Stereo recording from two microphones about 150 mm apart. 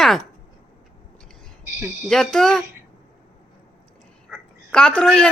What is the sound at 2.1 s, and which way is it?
Speech, 5° left (ahead or behind).